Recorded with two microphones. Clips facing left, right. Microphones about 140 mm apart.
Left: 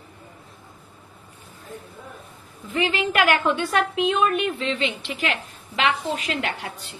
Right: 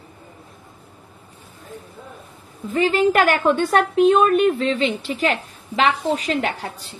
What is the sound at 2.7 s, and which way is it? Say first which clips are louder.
A woman's voice: right 6 dB; 40° right (ahead or behind).